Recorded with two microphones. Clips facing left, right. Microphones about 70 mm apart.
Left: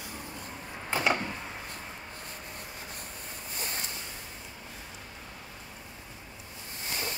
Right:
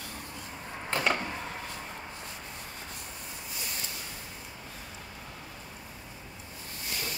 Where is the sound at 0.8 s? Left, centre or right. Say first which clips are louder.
Left 1 dB; centre.